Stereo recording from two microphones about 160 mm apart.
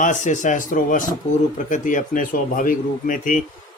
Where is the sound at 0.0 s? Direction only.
50° left (ahead or behind).